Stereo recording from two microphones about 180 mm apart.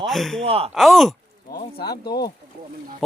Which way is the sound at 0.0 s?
Centre (ahead or behind).